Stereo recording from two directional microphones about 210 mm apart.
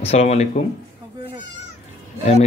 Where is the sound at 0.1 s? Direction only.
30° left (ahead or behind).